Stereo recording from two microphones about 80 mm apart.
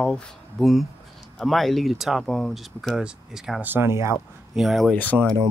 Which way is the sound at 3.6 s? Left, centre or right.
Right.